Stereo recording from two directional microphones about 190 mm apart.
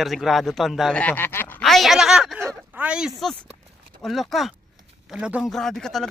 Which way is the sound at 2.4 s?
5° right (ahead or behind).